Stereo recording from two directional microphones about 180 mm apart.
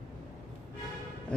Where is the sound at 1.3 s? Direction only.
5° left (ahead or behind).